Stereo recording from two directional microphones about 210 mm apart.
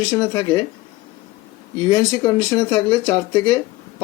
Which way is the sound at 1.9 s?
15° left (ahead or behind).